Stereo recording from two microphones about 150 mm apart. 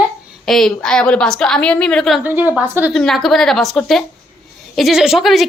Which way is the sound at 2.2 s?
10° right (ahead or behind).